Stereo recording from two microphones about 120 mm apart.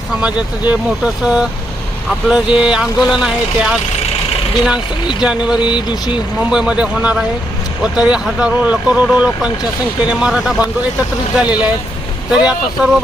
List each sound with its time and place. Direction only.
0.2 s speech: 10° right (ahead or behind)
5.2 s speech: 10° right (ahead or behind)
5.5 s speech: 40° left (ahead or behind)
6.4 s speech: 5° right (ahead or behind)